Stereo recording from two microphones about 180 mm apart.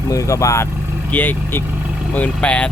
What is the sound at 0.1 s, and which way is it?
Speech, 20° left (ahead or behind).